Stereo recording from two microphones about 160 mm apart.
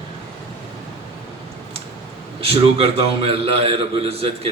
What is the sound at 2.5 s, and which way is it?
A man's voice, 40° right (ahead or behind).